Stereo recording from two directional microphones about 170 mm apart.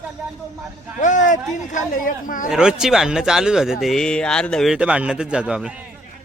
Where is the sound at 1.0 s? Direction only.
45° left (ahead or behind).